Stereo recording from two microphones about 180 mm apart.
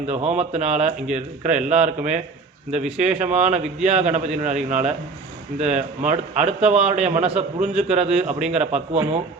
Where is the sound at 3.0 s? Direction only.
40° right (ahead or behind).